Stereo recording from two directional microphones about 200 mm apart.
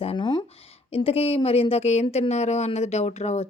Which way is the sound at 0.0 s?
25° left (ahead or behind).